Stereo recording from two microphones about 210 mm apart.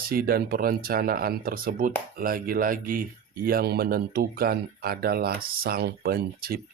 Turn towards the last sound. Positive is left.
turn(degrees=-45)  # may be behind; listen again after turning